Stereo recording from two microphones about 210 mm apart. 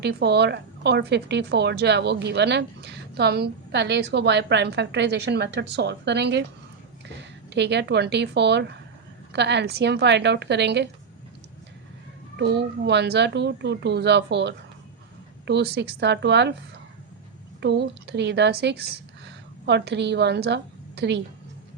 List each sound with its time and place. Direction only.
0.0 s a woman's voice: 50° right (ahead or behind)
12.4 s a woman's voice: 50° right (ahead or behind)
17.6 s a woman's voice: 55° right (ahead or behind)